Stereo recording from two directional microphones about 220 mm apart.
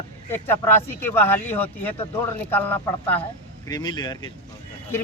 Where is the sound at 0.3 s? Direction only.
10° left (ahead or behind).